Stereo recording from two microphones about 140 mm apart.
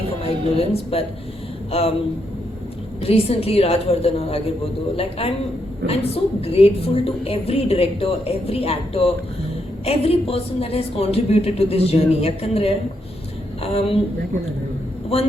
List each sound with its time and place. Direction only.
0.2 s a woman's voice: 45° left (ahead or behind)
3.0 s a woman's voice: 45° left (ahead or behind)